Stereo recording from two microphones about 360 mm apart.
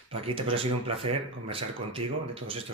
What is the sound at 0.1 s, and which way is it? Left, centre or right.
Speech, centre.